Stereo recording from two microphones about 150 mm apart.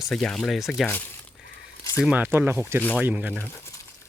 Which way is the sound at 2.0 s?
10° right (ahead or behind).